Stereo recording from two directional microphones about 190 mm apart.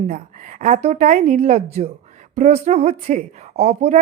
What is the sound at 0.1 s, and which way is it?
A woman's voice, 35° right (ahead or behind).